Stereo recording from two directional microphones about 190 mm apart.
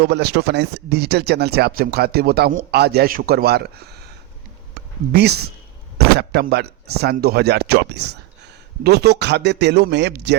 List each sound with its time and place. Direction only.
0.0 s speech: 60° right (ahead or behind)
4.7 s a sound: 60° right (ahead or behind)
6.1 s speech: 60° right (ahead or behind)